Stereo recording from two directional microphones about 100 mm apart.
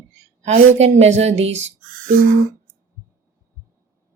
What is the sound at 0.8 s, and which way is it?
Speech, 90° right.